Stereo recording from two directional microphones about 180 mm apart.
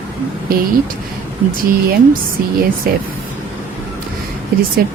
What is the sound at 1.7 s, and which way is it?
Speech, 55° right (ahead or behind).